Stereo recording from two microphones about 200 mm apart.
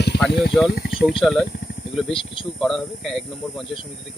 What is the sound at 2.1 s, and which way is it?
Speech, 25° left (ahead or behind).